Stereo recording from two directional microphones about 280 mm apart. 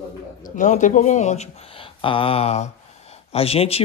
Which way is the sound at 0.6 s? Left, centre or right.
Left.